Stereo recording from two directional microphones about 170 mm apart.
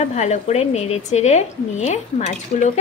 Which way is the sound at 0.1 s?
40° left (ahead or behind).